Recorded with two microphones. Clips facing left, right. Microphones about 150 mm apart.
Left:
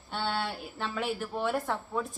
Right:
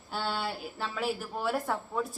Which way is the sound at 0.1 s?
Centre (ahead or behind).